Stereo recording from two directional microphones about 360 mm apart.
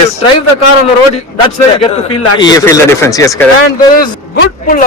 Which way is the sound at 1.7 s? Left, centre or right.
Centre.